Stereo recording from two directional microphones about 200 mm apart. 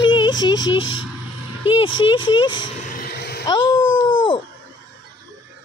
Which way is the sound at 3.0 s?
50° left (ahead or behind).